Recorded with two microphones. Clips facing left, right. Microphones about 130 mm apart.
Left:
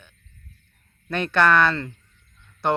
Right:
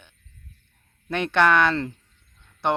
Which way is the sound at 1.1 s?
15° right (ahead or behind).